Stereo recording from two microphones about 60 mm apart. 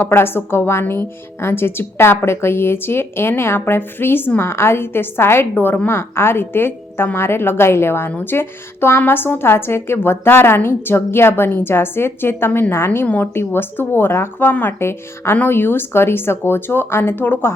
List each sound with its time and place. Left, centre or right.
0.0 s a woman's voice: left